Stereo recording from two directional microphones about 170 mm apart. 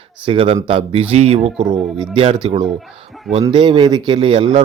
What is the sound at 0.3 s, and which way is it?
Speech, 30° right (ahead or behind).